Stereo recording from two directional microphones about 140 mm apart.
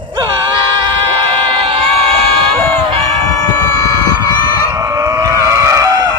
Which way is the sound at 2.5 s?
45° right (ahead or behind).